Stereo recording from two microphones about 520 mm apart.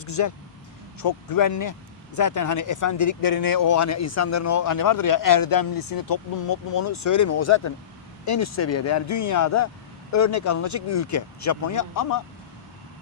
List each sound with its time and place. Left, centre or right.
0.0 s speech: left